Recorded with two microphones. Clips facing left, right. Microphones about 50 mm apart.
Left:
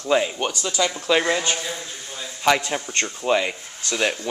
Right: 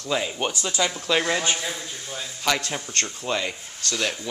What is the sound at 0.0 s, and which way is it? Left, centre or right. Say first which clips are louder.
Speech: left 6 dB; centre.